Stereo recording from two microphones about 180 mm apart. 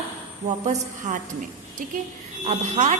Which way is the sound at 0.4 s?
40° right (ahead or behind).